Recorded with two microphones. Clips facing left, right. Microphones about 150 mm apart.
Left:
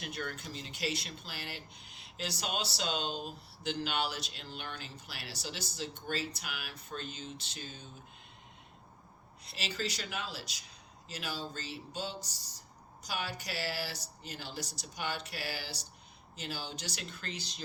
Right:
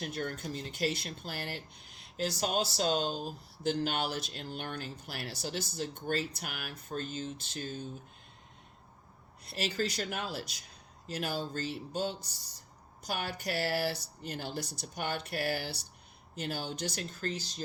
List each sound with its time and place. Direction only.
0.0 s speech: 45° right (ahead or behind)
9.4 s speech: 50° right (ahead or behind)